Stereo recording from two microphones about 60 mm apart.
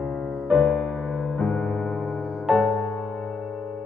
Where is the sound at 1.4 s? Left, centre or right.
Centre.